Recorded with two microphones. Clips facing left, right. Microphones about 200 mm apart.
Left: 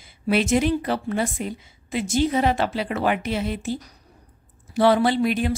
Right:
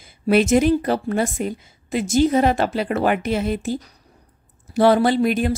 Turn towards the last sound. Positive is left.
turn(degrees=-45)  # may be behind; listen again after turning